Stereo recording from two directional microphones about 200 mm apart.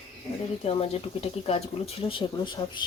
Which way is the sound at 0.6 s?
30° left (ahead or behind).